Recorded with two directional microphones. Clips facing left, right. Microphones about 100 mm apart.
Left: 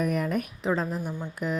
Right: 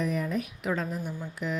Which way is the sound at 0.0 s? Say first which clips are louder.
Left 3 dB; 65° left (ahead or behind).